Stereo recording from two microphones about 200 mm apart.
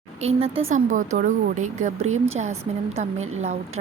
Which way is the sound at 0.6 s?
40° right (ahead or behind).